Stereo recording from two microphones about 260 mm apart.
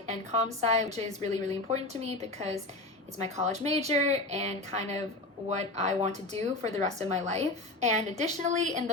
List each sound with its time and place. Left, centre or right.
0.1 s speech: right